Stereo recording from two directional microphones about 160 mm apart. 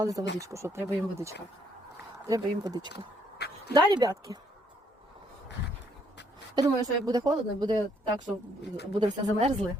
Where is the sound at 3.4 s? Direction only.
90° left.